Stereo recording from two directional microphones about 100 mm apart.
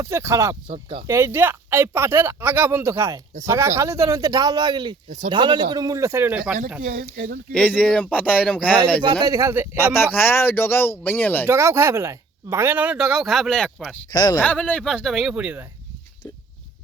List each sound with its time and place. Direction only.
0.0 s speech: 30° right (ahead or behind)
0.7 s speech: 70° right (ahead or behind)
1.0 s speech: 25° right (ahead or behind)
6.3 s speech: 10° right (ahead or behind)
7.8 s speech: 10° left (ahead or behind)
9.2 s speech: 35° right (ahead or behind)
9.7 s speech: 20° left (ahead or behind)
11.4 s speech: 25° right (ahead or behind); by 13.9 s 5° left (ahead or behind)
14.1 s speech: 45° left (ahead or behind)
14.4 s speech: 15° left (ahead or behind); by 15.6 s 15° right (ahead or behind)